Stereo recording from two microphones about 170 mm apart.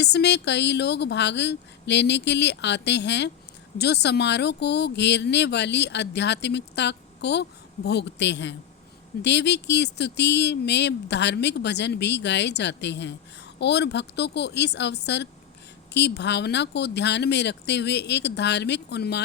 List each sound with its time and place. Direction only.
0.0 s speech: 80° left
3.8 s speech: 75° left (ahead or behind)